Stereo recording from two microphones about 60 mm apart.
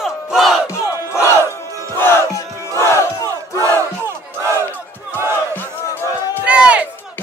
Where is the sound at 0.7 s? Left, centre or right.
Left.